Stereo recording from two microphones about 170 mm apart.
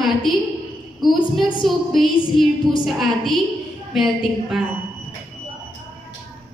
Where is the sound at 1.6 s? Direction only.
Centre (ahead or behind).